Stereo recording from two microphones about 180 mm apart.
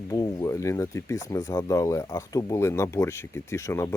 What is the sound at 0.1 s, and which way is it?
Speech, 20° left (ahead or behind).